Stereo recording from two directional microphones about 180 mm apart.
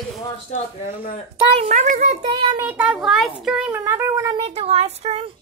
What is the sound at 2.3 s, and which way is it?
Child singing, 25° right (ahead or behind).